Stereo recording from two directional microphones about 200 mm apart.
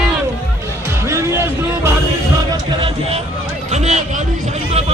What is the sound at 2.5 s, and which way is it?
Music, 25° right (ahead or behind).